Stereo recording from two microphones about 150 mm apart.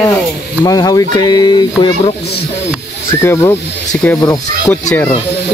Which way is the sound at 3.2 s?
20° left (ahead or behind).